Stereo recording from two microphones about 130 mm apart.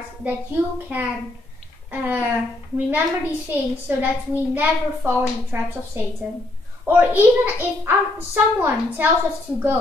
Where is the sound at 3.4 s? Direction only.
15° right (ahead or behind).